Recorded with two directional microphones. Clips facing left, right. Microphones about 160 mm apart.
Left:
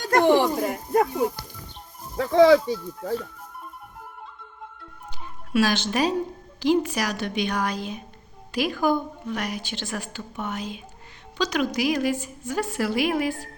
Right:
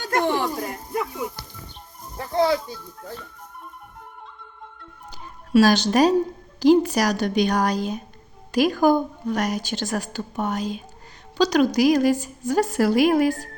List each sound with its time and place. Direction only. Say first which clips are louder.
0.3 s a sound: left 5 dB; 20° left (ahead or behind)
2.1 s speech: left 6 dB; 90° left
5.5 s a woman's voice: right 6 dB; 40° right (ahead or behind)